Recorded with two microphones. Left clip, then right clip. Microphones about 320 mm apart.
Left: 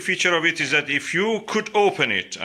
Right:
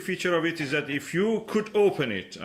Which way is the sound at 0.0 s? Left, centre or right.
Centre.